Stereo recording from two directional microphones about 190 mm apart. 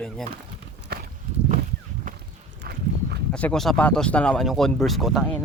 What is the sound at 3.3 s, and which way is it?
Speech, 5° left (ahead or behind).